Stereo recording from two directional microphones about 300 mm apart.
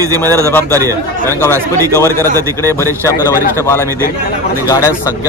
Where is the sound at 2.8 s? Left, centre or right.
Centre.